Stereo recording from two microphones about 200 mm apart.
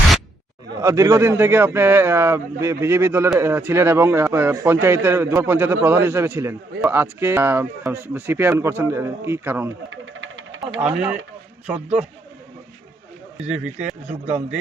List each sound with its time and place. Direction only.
0.8 s a man's voice: 15° right (ahead or behind)
9.9 s a sound: 75° right (ahead or behind)
10.8 s a man's voice: 5° right (ahead or behind)
13.5 s a man's voice: 5° right (ahead or behind)